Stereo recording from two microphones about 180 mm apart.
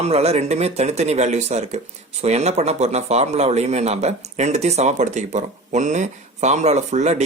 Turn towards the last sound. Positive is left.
turn(degrees=-40)  # may be behind; listen again after turning